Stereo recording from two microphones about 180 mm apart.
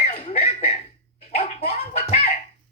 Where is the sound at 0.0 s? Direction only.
35° left (ahead or behind).